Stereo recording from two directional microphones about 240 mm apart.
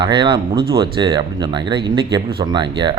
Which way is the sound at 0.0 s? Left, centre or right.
Centre.